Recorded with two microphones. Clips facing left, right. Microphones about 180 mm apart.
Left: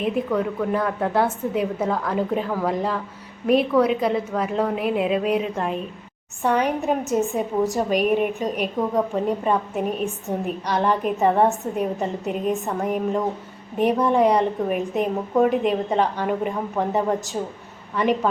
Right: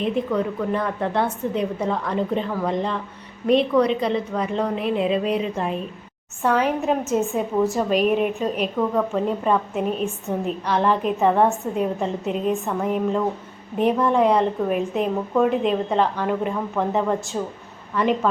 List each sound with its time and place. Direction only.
0.0 s a woman's voice: 5° left (ahead or behind)